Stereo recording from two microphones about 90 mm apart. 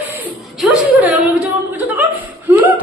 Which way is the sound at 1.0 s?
15° right (ahead or behind).